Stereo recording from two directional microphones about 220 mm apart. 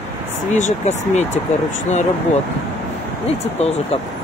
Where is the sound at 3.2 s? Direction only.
30° left (ahead or behind).